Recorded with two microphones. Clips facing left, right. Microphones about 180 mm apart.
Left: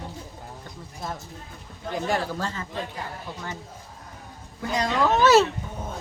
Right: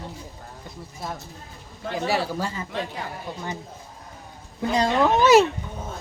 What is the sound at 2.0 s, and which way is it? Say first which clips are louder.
Speech: right 2 dB; 5° right (ahead or behind).